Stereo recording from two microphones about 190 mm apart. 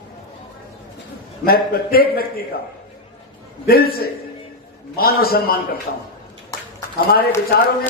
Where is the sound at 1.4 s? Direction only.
50° left (ahead or behind).